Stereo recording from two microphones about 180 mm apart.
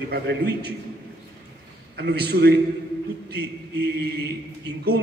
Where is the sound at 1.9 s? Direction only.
65° right (ahead or behind).